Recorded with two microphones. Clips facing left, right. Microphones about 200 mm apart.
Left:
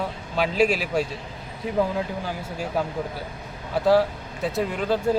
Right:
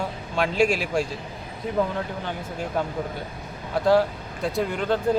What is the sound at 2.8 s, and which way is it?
Speech, 5° left (ahead or behind).